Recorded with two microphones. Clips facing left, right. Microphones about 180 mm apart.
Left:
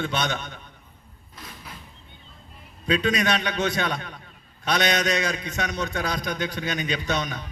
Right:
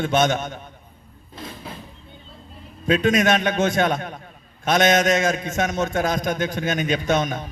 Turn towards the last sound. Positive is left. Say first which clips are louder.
# right 6 dB
turn(degrees=-50)  # may be behind; listen again after turning